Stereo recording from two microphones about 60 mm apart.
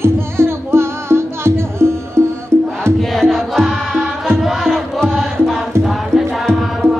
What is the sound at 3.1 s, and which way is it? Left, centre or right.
Music, centre.